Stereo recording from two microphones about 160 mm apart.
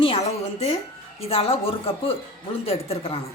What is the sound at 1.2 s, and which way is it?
Speech, 40° left (ahead or behind).